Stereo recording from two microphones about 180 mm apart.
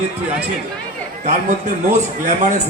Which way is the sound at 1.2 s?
40° right (ahead or behind).